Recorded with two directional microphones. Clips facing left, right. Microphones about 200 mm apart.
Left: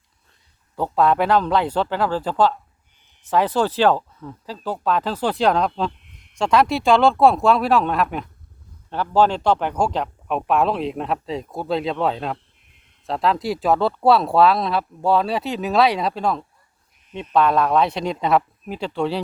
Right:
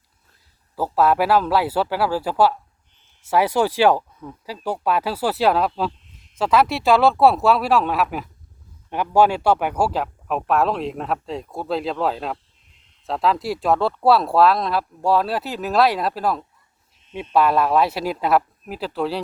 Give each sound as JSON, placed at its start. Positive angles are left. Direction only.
{"t": 0.8, "sound": "speech", "side_deg": -5}
{"t": 5.9, "sound": "a sound", "side_deg": 60}
{"t": 6.4, "sound": "a man's voice", "side_deg": 0}